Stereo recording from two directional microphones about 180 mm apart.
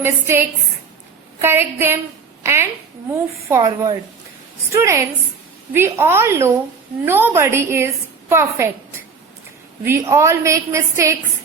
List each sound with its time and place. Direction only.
0.0 s a woman's voice: 15° right (ahead or behind)
10.1 s a woman's voice: 15° right (ahead or behind)